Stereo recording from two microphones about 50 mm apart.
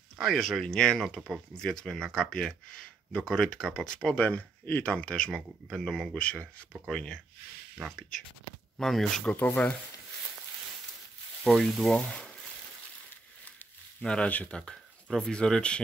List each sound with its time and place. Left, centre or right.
0.2 s speech: centre
1.3 s speech: centre
1.7 s speech: centre
4.1 s speech: left
4.9 s speech: centre
8.7 s speech: centre
9.2 s speech: left
11.4 s speech: centre
12.1 s speech: centre
14.0 s speech: left
14.6 s speech: centre